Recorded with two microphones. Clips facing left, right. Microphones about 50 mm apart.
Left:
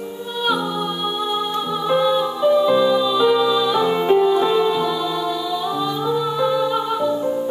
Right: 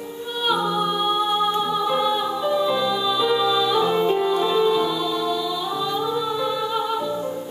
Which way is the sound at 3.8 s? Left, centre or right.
Left.